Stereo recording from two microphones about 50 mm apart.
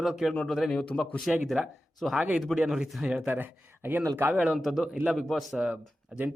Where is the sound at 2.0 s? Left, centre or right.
Centre.